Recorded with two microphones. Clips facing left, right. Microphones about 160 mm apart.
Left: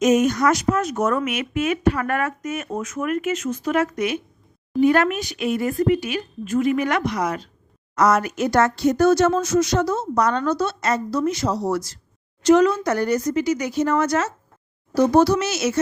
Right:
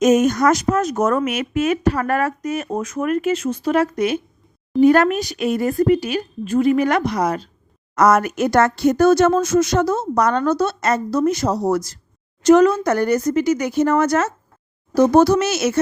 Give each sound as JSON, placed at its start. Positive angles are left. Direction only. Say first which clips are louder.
{"t": 0.0, "sound": "speech", "louder": "right 3 dB", "side_deg": -45}
{"t": 7.9, "sound": "speech", "louder": "right 3 dB", "side_deg": -50}